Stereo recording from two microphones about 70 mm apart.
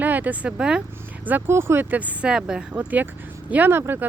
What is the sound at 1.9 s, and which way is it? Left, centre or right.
Speech, right.